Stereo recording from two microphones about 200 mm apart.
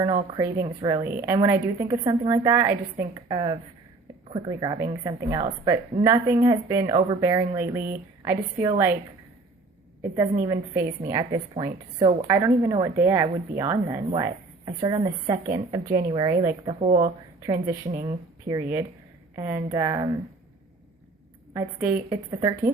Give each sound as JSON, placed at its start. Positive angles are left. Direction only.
{"t": 0.0, "sound": "a woman's voice", "side_deg": -25}
{"t": 0.4, "sound": "a woman's voice", "side_deg": -15}
{"t": 10.4, "sound": "a woman's voice", "side_deg": -15}
{"t": 16.8, "sound": "speech", "side_deg": -30}
{"t": 17.4, "sound": "a woman's voice", "side_deg": -20}
{"t": 21.5, "sound": "a woman's voice", "side_deg": -10}